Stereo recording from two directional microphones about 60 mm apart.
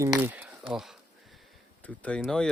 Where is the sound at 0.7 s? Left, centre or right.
Centre.